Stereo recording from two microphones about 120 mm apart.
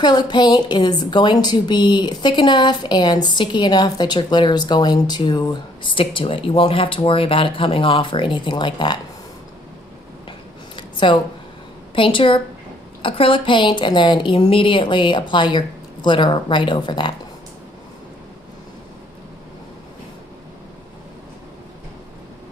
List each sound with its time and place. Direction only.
0.0 s a woman's voice: 35° left (ahead or behind)
10.8 s a sound: 40° left (ahead or behind)
11.9 s a woman's voice: 45° left (ahead or behind)